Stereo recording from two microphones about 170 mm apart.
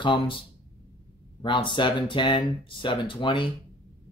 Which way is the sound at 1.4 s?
30° left (ahead or behind).